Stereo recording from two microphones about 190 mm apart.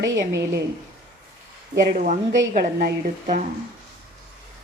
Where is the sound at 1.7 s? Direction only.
45° right (ahead or behind).